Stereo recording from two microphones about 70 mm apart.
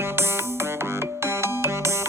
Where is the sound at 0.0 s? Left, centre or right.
Right.